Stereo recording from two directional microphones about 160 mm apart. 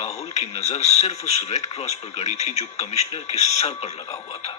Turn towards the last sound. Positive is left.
turn(degrees=40)  # may be behind; listen again after turning